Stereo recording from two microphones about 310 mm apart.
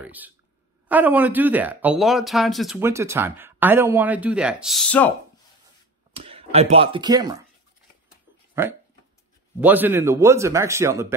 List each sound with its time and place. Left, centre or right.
0.0 s a sound: centre
0.8 s speech: centre
6.1 s speech: centre
8.6 s speech: centre